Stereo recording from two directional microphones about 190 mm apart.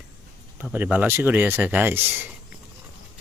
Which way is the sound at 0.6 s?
10° right (ahead or behind).